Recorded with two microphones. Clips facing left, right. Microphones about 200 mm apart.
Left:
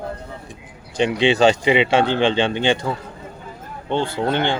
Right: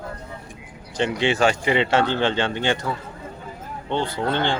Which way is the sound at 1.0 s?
20° left (ahead or behind).